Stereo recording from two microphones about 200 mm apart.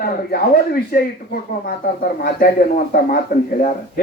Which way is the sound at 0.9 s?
45° left (ahead or behind).